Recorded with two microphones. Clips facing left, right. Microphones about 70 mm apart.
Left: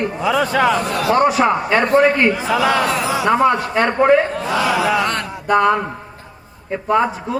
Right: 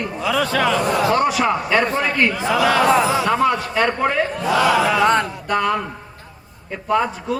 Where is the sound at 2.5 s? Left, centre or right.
Centre.